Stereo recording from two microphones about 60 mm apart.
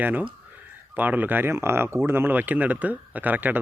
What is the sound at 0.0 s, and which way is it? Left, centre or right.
Speech, right.